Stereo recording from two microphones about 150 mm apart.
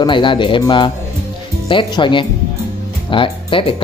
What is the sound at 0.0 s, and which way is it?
Speech, 35° left (ahead or behind).